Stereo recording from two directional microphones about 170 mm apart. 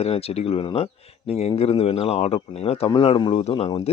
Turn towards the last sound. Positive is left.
turn(degrees=35)  # may be behind; listen again after turning